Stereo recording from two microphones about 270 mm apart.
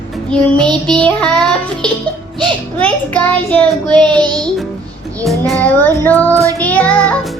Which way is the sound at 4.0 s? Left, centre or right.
Centre.